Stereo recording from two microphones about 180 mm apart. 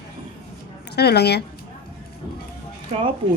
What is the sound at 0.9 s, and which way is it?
Speech, 65° left (ahead or behind).